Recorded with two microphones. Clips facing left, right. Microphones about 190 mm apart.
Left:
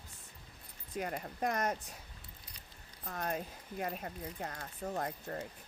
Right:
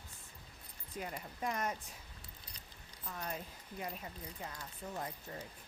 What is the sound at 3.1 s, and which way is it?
Speech, 55° left (ahead or behind).